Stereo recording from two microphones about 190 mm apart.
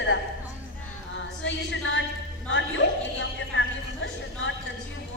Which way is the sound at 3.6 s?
75° left (ahead or behind).